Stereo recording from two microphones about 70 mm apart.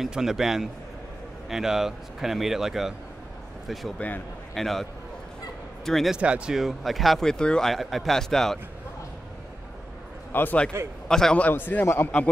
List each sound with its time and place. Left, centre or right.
0.0 s speech: centre
5.9 s speech: centre
6.1 s speech: centre
6.6 s speech: centre
7.7 s speech: centre
10.3 s a man's voice: left
11.1 s a man's voice: centre
11.3 s a man's voice: left